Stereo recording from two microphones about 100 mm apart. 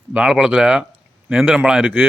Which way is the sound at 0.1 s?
10° right (ahead or behind).